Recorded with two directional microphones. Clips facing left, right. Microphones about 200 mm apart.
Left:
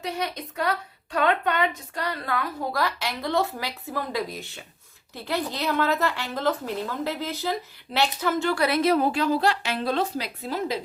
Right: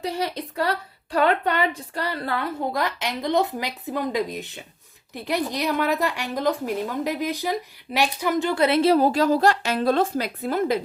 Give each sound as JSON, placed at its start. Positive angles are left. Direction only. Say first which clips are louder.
{"t": 0.0, "sound": "a woman's voice", "louder": "right 3 dB", "side_deg": -30}